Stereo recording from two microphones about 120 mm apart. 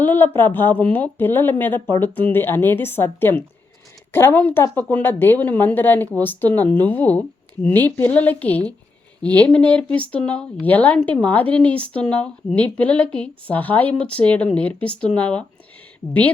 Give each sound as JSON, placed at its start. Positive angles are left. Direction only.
{"t": 0.0, "sound": "a woman's voice", "side_deg": 15}